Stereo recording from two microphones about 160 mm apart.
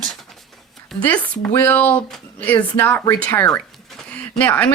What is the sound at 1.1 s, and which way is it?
Speech, 10° left (ahead or behind).